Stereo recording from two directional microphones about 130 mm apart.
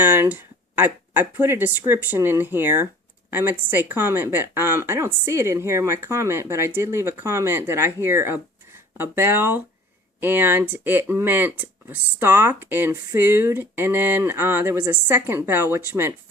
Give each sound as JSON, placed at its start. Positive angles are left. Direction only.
{"t": 0.0, "sound": "speech", "side_deg": -15}